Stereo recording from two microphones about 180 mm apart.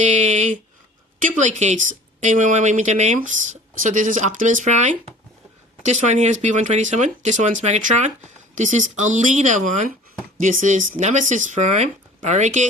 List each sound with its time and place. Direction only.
0.0 s speech: 40° right (ahead or behind)